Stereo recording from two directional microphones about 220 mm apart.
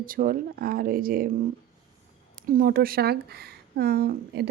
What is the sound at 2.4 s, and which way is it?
A woman's voice, 40° right (ahead or behind).